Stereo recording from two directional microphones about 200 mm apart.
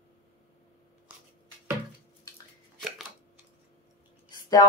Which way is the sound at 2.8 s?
Centre (ahead or behind).